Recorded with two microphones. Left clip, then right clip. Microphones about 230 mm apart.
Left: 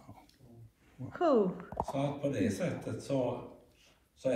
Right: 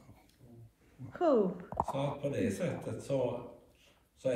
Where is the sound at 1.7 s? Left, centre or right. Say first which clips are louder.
Right 1 dB; centre.